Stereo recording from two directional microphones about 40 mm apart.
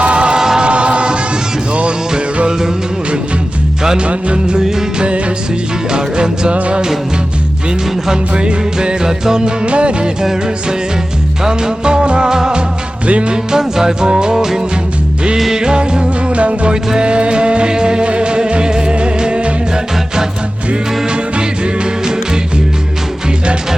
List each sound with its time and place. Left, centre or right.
0.0 s music: right
0.3 s music: centre
0.6 s choir: right
1.7 s music: right
3.8 s music: right
8.3 s music: right
9.6 s music: right
10.2 s music: centre
13.1 s music: right
13.3 s music: centre
21.1 s music: right